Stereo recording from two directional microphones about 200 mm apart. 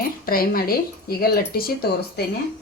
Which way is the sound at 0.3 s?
45° left (ahead or behind).